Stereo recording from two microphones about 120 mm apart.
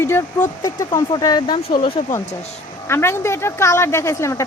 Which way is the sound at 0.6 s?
30° left (ahead or behind).